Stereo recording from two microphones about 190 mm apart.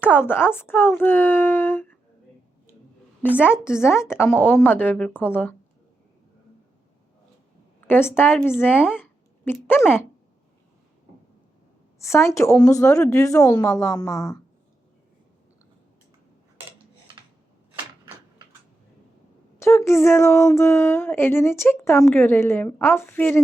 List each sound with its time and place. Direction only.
0.2 s speech: 10° left (ahead or behind)
3.6 s speech: 15° left (ahead or behind)
7.9 s speech: 10° left (ahead or behind)
11.9 s a woman's voice: 15° left (ahead or behind)
19.5 s speech: 15° left (ahead or behind)